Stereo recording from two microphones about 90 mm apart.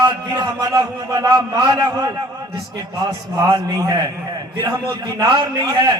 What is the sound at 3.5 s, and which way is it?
Speech, 45° right (ahead or behind).